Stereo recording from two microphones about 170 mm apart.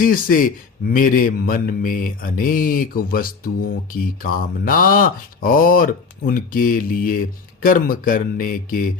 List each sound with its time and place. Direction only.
0.0 s speech: 55° left (ahead or behind)